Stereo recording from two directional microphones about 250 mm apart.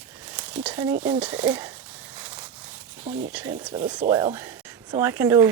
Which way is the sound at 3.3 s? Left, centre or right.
Centre.